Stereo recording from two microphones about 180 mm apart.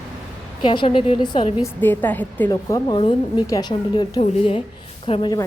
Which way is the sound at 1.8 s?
10° left (ahead or behind).